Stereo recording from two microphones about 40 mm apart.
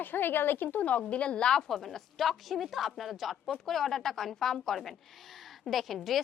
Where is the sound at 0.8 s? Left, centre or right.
Left.